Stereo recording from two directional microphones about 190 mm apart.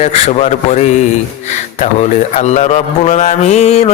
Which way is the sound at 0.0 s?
35° left (ahead or behind).